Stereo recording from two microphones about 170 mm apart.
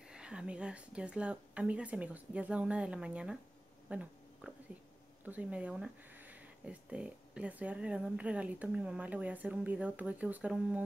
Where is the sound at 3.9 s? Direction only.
5° right (ahead or behind).